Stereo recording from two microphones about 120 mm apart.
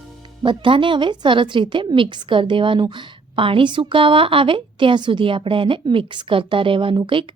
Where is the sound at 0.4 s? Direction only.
45° right (ahead or behind).